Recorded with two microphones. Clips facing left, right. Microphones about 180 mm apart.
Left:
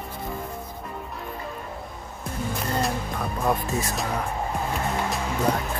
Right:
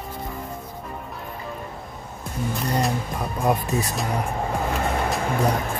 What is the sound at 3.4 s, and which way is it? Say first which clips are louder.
Speech: right 3 dB; 20° right (ahead or behind).